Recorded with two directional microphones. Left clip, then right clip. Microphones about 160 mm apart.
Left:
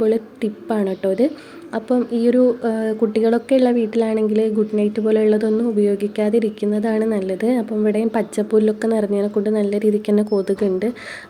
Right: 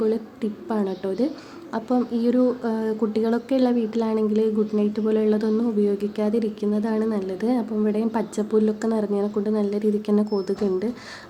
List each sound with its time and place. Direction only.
0.0 s a woman's voice: 20° left (ahead or behind)